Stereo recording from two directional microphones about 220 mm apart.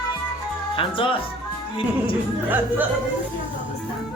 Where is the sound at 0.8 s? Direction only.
25° left (ahead or behind).